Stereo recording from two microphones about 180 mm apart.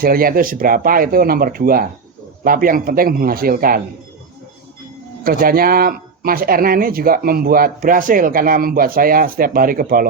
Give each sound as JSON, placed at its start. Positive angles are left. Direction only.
{"t": 0.0, "sound": "speech", "side_deg": -55}
{"t": 5.2, "sound": "speech", "side_deg": -55}